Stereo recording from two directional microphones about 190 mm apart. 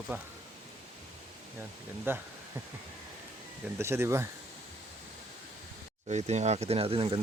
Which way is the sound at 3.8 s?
15° right (ahead or behind).